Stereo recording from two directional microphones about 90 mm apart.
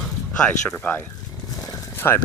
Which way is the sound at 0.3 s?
15° left (ahead or behind).